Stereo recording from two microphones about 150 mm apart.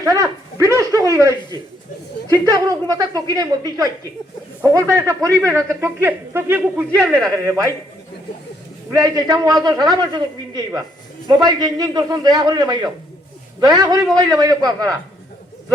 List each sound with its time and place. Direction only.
0.0 s speech: 20° right (ahead or behind)
0.6 s a sound: 20° right (ahead or behind)
2.4 s a man's voice: 25° right (ahead or behind)
7.0 s speech: centre (ahead or behind)
7.4 s a man's voice: 20° right (ahead or behind)
9.0 s a man's voice: 25° right (ahead or behind)